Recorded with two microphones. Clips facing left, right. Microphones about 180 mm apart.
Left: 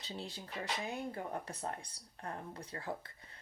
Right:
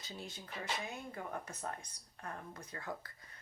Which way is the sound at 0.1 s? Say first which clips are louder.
Left 3 dB; 35° left (ahead or behind).